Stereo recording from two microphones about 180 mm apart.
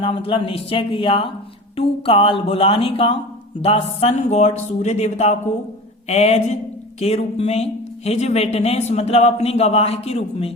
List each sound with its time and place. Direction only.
0.0 s speech: 30° left (ahead or behind)